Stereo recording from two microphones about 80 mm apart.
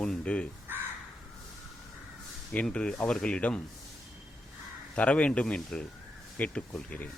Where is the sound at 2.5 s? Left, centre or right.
Centre.